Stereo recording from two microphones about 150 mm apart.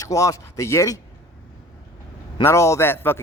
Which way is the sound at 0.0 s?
20° left (ahead or behind).